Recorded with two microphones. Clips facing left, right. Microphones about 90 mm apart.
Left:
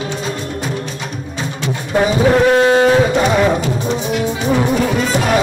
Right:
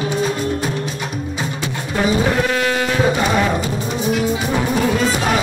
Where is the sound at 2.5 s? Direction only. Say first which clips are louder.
Left 8 dB; 35° left (ahead or behind).